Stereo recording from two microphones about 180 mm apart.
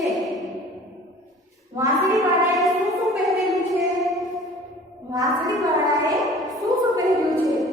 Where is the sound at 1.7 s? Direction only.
20° right (ahead or behind).